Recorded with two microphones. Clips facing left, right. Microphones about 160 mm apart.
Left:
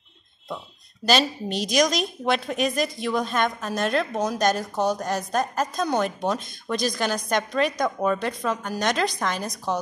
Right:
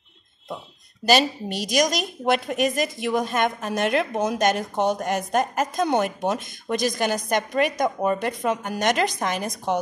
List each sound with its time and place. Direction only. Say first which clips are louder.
1.0 s a woman's voice: right 2 dB; 10° right (ahead or behind)